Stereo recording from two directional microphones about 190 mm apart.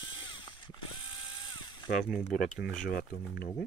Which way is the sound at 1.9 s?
Centre (ahead or behind).